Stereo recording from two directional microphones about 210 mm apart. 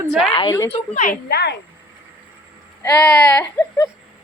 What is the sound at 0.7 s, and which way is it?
Speech, 40° left (ahead or behind).